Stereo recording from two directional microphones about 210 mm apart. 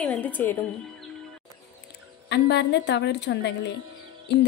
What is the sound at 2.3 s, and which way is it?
A woman's voice, 55° left (ahead or behind).